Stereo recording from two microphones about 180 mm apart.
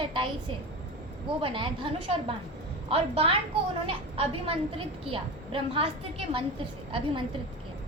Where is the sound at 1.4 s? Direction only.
30° right (ahead or behind).